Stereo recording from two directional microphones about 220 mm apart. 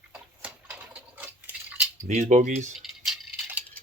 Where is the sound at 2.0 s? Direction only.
35° right (ahead or behind).